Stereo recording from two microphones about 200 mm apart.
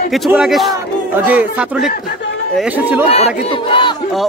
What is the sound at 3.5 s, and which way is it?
Speech, 25° left (ahead or behind).